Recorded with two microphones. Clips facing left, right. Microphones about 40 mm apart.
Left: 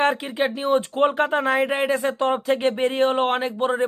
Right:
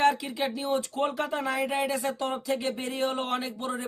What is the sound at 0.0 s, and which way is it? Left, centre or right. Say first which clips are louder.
Speech: left 4 dB; left.